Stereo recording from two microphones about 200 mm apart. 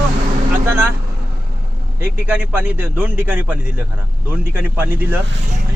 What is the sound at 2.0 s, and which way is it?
A man's voice, 10° right (ahead or behind).